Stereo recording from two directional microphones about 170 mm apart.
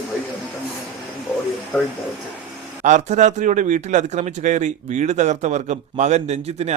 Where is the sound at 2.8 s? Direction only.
45° right (ahead or behind).